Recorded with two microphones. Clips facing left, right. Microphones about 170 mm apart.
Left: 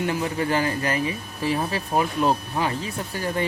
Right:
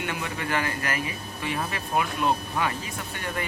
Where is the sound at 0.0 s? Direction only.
35° left (ahead or behind).